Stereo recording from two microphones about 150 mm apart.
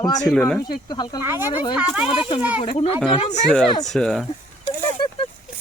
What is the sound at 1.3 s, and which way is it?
Speech, 15° right (ahead or behind).